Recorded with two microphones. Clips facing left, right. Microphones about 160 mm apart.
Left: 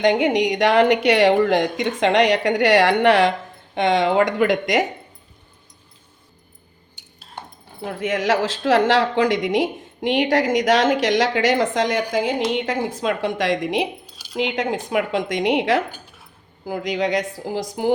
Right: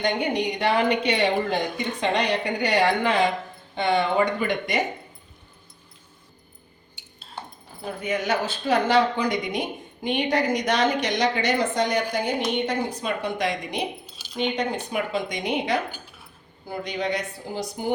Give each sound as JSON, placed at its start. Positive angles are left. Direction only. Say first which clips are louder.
{"t": 0.0, "sound": "speech", "louder": "left 7 dB", "side_deg": 90}
{"t": 3.8, "sound": "speech", "louder": "left 4 dB", "side_deg": 90}
{"t": 7.8, "sound": "speech", "louder": "left 4 dB", "side_deg": 85}